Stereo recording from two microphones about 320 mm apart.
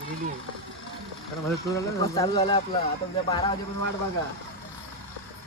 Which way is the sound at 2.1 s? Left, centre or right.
Centre.